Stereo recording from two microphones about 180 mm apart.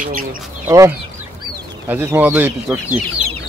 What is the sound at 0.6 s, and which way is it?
Speech, 15° right (ahead or behind).